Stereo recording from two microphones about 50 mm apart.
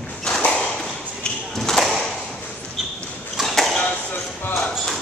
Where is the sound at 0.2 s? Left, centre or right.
Left.